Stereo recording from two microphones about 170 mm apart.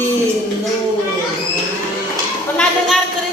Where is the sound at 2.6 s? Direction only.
Centre (ahead or behind).